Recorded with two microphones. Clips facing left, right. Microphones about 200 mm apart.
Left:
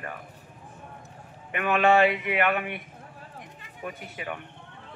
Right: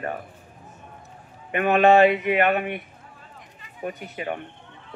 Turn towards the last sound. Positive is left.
turn(degrees=-35)  # may be behind; listen again after turning